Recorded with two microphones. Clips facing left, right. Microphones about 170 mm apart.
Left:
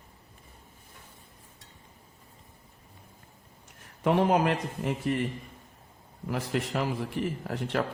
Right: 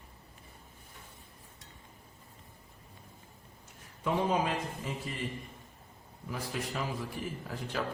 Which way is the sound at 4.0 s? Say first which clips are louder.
Left 6 dB; 70° left (ahead or behind).